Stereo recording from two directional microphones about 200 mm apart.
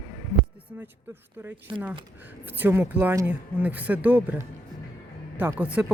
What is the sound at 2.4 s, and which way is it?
Speech, 10° right (ahead or behind).